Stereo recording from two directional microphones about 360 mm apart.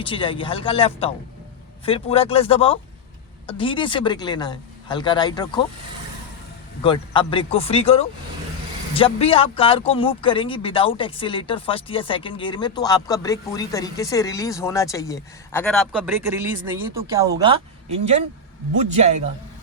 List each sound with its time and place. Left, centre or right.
0.0 s speech: centre
6.8 s speech: centre